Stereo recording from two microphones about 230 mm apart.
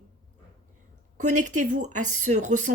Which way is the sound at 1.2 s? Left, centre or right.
Right.